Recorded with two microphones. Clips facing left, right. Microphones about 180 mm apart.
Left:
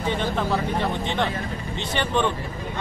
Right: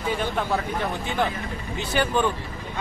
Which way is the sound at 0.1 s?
5° right (ahead or behind).